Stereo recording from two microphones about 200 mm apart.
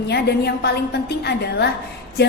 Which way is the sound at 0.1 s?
55° left (ahead or behind).